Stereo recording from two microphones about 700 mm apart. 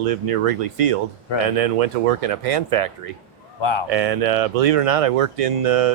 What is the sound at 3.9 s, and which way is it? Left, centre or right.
Speech, right.